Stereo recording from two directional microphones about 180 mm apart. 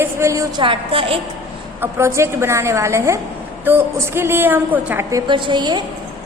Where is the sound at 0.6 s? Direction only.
30° right (ahead or behind).